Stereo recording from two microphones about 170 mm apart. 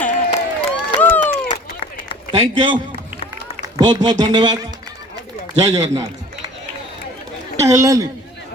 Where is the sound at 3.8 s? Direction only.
25° right (ahead or behind).